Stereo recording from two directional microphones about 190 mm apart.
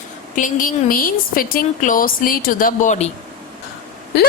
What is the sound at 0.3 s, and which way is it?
A woman's voice, 45° left (ahead or behind).